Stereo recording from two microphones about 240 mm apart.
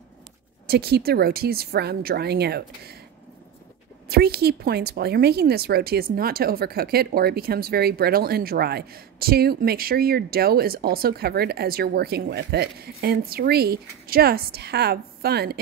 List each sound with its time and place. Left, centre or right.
0.7 s speech: right
4.1 s speech: right